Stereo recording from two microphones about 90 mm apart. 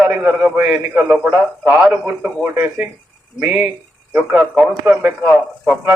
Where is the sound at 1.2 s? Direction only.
20° right (ahead or behind).